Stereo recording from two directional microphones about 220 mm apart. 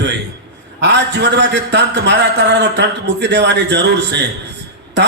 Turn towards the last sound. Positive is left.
turn(degrees=-55)  # may be behind; listen again after turning